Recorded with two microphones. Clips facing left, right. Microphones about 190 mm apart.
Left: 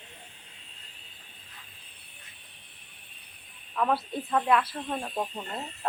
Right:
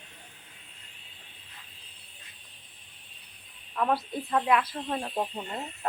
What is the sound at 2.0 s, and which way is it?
Vehicle, 65° left (ahead or behind).